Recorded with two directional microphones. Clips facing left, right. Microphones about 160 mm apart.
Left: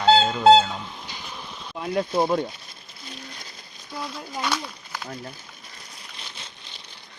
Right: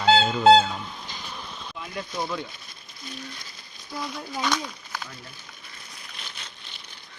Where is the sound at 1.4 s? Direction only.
5° left (ahead or behind).